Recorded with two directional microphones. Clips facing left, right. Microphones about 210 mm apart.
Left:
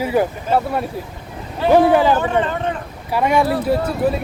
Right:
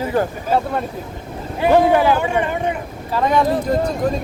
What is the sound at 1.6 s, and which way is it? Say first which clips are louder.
Speech: left 1 dB; 15° right (ahead or behind).